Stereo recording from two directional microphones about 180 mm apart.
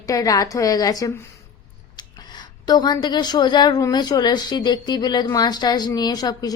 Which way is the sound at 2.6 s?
20° left (ahead or behind).